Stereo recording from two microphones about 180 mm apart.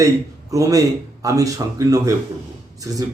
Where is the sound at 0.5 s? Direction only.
20° right (ahead or behind).